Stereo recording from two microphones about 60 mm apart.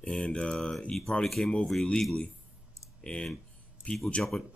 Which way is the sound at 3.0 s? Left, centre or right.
Centre.